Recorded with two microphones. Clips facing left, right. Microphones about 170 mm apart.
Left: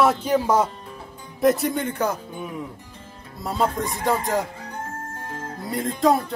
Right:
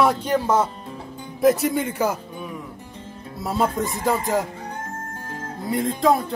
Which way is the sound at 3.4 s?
Centre (ahead or behind).